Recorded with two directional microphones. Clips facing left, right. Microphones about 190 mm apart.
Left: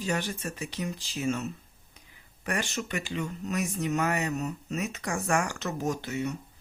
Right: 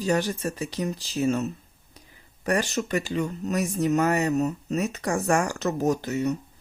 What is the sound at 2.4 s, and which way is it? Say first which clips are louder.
Speech: right 7 dB; 40° right (ahead or behind).